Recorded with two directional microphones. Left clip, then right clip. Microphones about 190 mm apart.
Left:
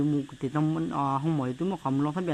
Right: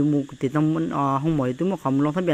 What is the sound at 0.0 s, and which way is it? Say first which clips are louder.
Speech: right 6 dB; 15° right (ahead or behind).